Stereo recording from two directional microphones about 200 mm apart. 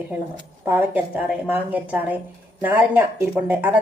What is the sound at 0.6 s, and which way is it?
A woman's voice, 10° right (ahead or behind).